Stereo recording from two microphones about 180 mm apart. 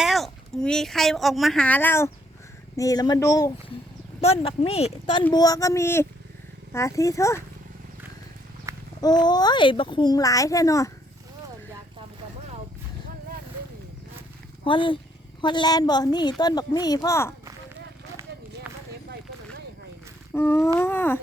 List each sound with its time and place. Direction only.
0.0 s speech: centre (ahead or behind); by 3.5 s 20° left (ahead or behind)
4.2 s speech: 35° left (ahead or behind)
5.3 s speech: 20° left (ahead or behind)
9.0 s speech: 20° left (ahead or behind)
14.6 s speech: 30° left (ahead or behind)
20.3 s speech: 15° left (ahead or behind)